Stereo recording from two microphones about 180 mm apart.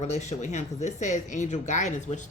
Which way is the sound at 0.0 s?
40° left (ahead or behind).